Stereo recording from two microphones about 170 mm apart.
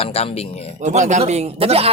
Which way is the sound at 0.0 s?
35° left (ahead or behind).